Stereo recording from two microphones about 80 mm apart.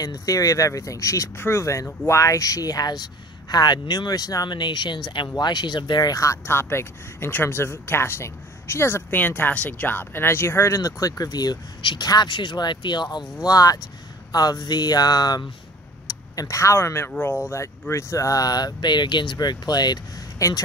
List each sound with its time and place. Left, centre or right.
0.0 s speech: left
4.5 s speech: left
5.4 s speech: left
6.1 s speech: left
11.8 s speech: left
12.1 s speech: left
13.4 s speech: left
16.1 s speech: left
19.3 s speech: left
20.3 s speech: left